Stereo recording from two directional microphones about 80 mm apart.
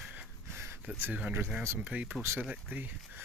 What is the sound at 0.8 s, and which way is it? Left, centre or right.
Speech, centre.